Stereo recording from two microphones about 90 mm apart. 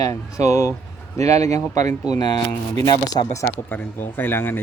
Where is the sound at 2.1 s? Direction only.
50° left (ahead or behind).